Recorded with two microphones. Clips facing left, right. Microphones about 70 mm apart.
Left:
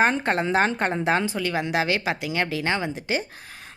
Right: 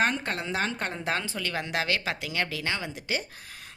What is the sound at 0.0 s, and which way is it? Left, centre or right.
Speech, left.